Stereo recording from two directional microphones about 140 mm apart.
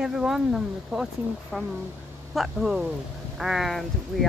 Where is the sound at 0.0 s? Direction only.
5° right (ahead or behind).